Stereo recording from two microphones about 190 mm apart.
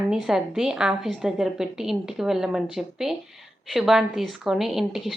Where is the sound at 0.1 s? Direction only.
5° right (ahead or behind).